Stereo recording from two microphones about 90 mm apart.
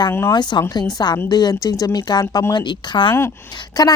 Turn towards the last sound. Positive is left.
turn(degrees=50)  # may be behind; listen again after turning